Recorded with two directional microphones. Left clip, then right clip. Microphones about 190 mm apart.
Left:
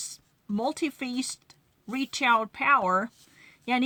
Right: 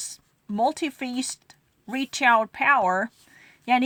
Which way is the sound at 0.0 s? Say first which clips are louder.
Right 2 dB; 35° right (ahead or behind).